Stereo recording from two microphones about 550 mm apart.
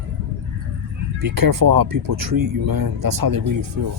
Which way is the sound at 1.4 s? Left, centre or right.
Right.